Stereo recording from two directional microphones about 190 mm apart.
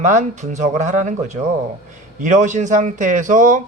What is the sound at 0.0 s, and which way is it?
Speech, 40° right (ahead or behind).